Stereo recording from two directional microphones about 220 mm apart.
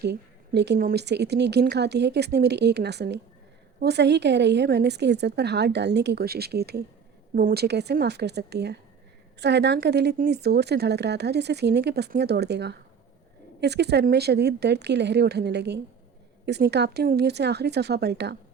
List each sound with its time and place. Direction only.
0.0 s speech: 50° right (ahead or behind)